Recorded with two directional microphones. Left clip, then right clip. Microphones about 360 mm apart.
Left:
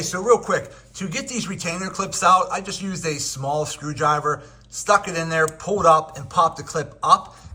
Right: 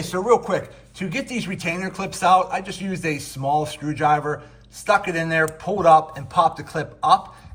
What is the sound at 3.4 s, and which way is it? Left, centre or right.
Speech, left.